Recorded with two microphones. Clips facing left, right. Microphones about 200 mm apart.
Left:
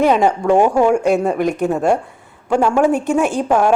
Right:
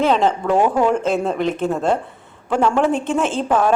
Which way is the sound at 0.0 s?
15° left (ahead or behind).